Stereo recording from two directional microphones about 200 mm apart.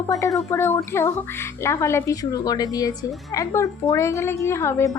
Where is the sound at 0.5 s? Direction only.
10° left (ahead or behind).